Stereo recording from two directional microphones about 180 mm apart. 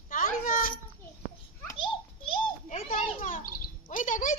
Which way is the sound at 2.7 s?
45° left (ahead or behind).